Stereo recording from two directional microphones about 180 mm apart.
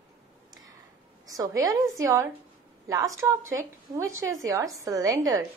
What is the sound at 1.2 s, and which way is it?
A woman's voice, 20° right (ahead or behind).